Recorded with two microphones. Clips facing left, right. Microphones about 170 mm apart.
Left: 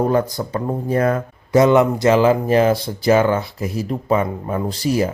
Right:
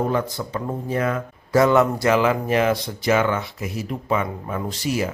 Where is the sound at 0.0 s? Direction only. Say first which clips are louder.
Left 5 dB; 40° left (ahead or behind).